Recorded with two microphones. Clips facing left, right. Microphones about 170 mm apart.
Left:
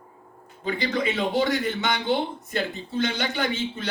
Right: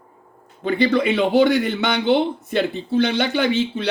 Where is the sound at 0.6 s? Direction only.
65° right (ahead or behind).